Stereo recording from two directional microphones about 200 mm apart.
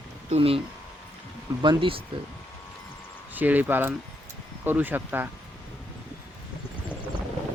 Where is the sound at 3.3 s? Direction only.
10° right (ahead or behind).